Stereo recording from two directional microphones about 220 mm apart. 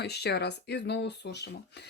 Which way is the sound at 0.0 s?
50° left (ahead or behind).